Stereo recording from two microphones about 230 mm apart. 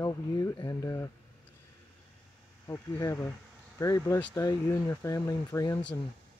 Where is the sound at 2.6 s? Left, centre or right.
Centre.